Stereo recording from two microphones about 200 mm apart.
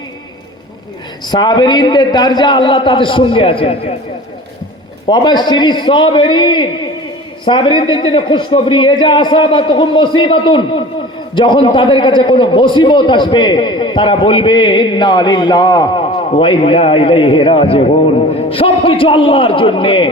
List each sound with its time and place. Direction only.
1.3 s a man's voice: 20° left (ahead or behind)
5.0 s a man's voice: 20° left (ahead or behind)